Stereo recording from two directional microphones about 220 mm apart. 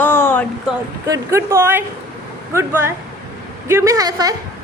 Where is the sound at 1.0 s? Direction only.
15° right (ahead or behind).